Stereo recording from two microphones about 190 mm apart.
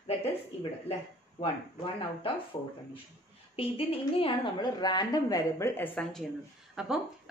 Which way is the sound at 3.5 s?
30° left (ahead or behind).